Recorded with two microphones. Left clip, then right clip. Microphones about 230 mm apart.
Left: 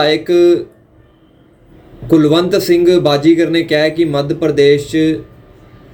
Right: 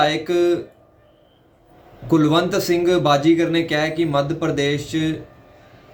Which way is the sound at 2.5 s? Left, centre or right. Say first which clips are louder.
Left 8 dB; right.